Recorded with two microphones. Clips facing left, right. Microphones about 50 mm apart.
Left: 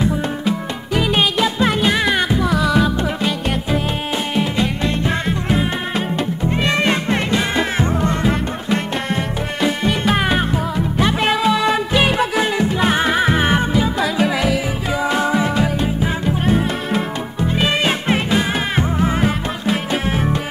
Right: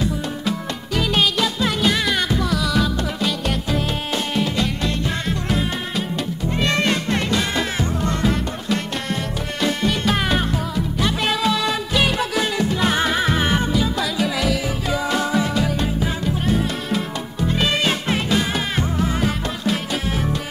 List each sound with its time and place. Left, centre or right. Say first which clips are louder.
0.0 s music: left 4 dB; left